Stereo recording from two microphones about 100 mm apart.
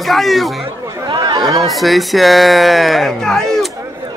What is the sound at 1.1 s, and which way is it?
Chatter, 45° right (ahead or behind).